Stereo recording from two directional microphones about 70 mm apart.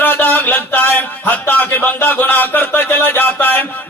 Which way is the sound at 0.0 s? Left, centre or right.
Left.